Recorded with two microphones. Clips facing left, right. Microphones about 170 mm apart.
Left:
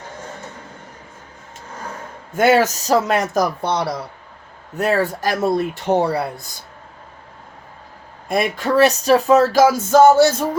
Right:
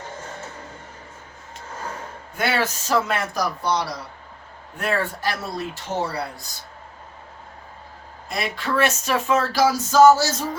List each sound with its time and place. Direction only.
2.3 s a man's voice: 45° left (ahead or behind)
4.8 s a man's voice: 40° left (ahead or behind); by 6.1 s 60° left (ahead or behind)
8.3 s speech: 50° left (ahead or behind)
10.2 s music: 55° left (ahead or behind)